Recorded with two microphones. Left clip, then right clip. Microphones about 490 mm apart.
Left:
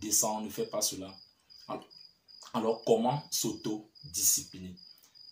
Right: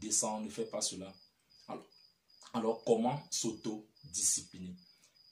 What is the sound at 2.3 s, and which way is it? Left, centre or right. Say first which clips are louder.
Speech: left 4 dB; right.